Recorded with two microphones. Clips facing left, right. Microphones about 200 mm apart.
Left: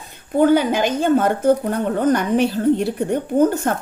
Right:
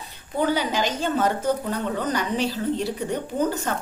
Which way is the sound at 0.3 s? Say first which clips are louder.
Left 8 dB; 50° left (ahead or behind).